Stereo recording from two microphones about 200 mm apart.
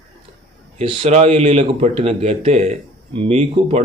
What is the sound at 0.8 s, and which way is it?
Speech, 25° right (ahead or behind).